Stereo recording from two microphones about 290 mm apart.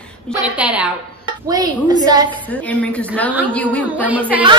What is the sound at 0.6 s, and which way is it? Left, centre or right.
A woman's voice, centre.